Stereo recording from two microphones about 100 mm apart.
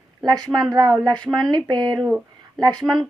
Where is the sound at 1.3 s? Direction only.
5° left (ahead or behind).